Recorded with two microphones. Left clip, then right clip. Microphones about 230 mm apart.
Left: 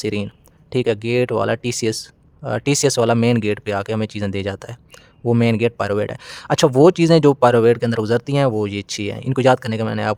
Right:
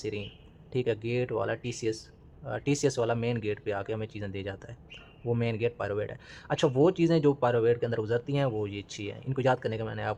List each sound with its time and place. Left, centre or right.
0.0 s speech: left